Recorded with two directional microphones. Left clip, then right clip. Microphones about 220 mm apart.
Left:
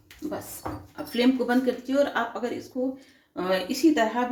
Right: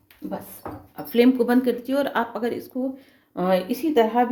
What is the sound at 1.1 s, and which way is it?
Speech, 50° right (ahead or behind).